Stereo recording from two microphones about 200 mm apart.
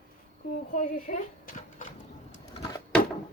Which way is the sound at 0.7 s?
40° left (ahead or behind).